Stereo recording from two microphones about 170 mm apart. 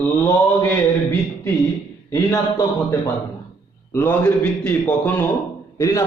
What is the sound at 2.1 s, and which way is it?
Speech, 20° left (ahead or behind).